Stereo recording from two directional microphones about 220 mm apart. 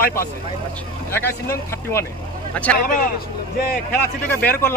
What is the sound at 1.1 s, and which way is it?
A man's voice, 10° left (ahead or behind).